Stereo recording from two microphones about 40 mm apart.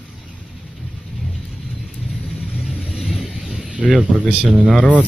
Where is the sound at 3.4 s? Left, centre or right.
Right.